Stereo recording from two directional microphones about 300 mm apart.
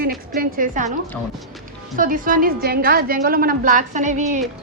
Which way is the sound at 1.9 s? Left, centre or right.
Right.